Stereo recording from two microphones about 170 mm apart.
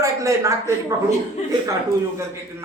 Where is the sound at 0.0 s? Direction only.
20° right (ahead or behind).